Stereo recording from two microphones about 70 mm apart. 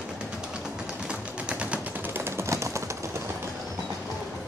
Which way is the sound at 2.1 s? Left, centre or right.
Right.